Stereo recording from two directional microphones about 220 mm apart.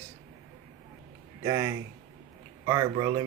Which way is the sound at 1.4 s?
15° right (ahead or behind).